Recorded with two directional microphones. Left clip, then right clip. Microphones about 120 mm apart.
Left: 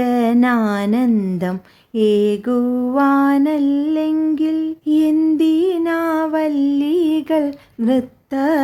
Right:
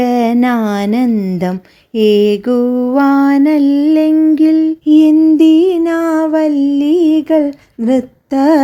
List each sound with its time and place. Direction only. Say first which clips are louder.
0.0 s a sound: right 4 dB; 20° right (ahead or behind)
1.1 s speech: right 3 dB; 10° right (ahead or behind)
2.0 s female singing: right 5 dB; 30° right (ahead or behind)
5.1 s music: right 7 dB; 20° right (ahead or behind)
5.4 s music: right 7 dB; 30° right (ahead or behind)
7.9 s a sound: right 5 dB; 35° right (ahead or behind)